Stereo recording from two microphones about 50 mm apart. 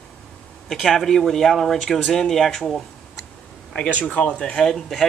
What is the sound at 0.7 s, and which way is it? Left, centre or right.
Speech, centre.